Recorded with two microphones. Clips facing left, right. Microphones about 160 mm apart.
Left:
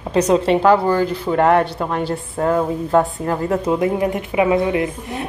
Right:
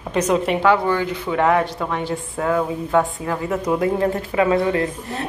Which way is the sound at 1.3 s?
55° left (ahead or behind).